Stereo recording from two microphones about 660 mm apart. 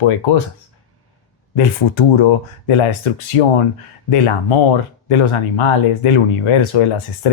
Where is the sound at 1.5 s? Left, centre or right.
Left.